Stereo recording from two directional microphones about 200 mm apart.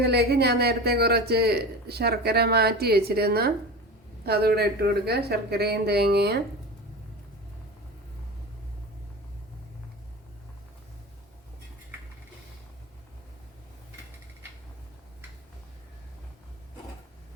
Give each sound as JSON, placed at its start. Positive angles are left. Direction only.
{"t": 0.0, "sound": "speech", "side_deg": -55}